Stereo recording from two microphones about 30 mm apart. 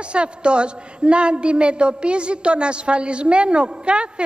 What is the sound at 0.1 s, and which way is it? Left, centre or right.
A woman's voice, right.